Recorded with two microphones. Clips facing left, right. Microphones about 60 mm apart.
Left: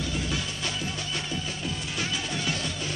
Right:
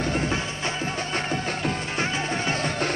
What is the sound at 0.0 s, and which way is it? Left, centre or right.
Music, right.